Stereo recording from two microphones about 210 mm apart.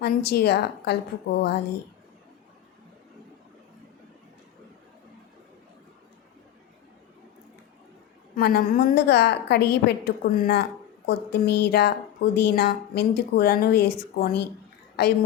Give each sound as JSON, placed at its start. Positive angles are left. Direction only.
{"t": 0.0, "sound": "a woman's voice", "side_deg": 50}
{"t": 8.4, "sound": "a woman's voice", "side_deg": 50}
{"t": 15.0, "sound": "a woman's voice", "side_deg": 55}